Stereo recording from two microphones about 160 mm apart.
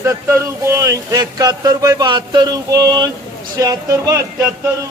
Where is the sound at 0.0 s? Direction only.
15° right (ahead or behind).